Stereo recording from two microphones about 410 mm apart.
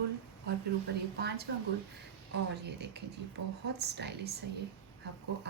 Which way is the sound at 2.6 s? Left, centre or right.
Right.